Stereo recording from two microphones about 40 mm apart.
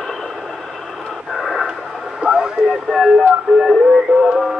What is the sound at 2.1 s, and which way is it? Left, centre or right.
Radio, centre.